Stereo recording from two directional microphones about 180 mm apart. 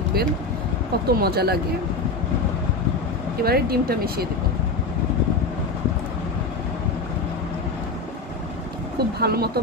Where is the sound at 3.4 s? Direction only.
60° right (ahead or behind).